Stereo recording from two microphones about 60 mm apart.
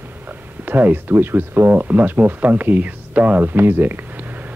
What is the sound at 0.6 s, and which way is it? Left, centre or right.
Speech, right.